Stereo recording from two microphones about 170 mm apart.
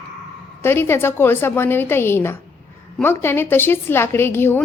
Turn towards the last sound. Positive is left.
turn(degrees=15)  # may be behind; listen again after turning